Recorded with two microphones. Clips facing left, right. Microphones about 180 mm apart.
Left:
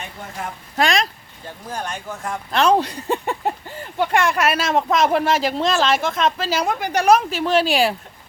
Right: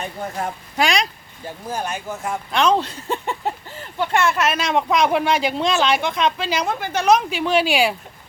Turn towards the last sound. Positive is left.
turn(degrees=0)  # may be behind; listen again after turning